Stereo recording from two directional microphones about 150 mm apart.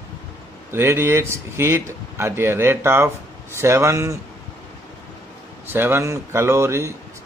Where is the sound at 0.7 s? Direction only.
15° right (ahead or behind).